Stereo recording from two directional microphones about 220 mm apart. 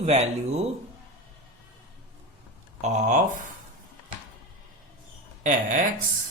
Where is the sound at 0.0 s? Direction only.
30° right (ahead or behind).